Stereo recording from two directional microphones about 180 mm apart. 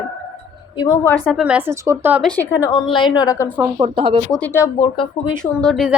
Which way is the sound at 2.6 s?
25° left (ahead or behind).